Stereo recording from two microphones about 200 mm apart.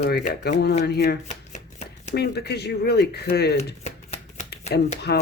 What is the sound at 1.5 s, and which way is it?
Shuffling cards, 35° left (ahead or behind).